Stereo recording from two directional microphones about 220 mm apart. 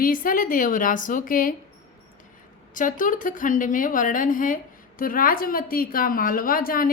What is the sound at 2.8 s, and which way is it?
A woman's voice, 35° left (ahead or behind).